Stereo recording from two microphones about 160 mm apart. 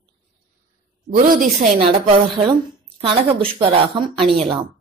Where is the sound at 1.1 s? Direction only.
60° right (ahead or behind).